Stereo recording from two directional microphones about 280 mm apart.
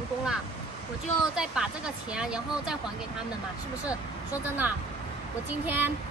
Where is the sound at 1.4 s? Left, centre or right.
Centre.